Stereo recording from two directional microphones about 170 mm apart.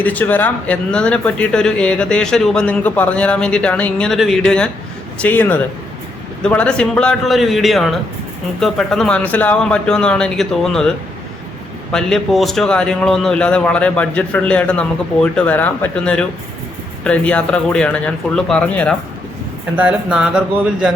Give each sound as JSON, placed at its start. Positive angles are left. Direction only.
{"t": 0.0, "sound": "a man's voice", "side_deg": 10}
{"t": 19.7, "sound": "speech", "side_deg": -5}